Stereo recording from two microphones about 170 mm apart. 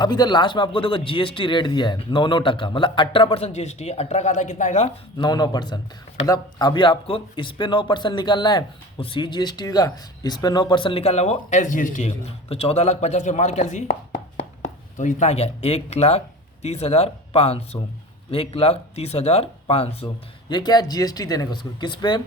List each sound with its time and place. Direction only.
0.0 s speech: 25° left (ahead or behind); by 4.9 s 40° left (ahead or behind)
5.1 s speech: 25° left (ahead or behind)
20.5 s speech: 25° left (ahead or behind)